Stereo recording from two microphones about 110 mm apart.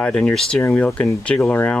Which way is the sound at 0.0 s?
5° left (ahead or behind).